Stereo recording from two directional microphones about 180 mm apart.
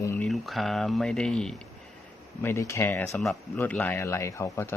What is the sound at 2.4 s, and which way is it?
Speech, 15° left (ahead or behind).